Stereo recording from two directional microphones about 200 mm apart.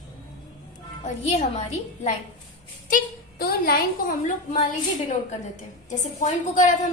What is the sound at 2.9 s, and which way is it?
Speech, 50° left (ahead or behind).